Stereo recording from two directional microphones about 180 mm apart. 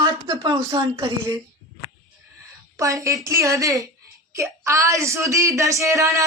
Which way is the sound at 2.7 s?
15° right (ahead or behind).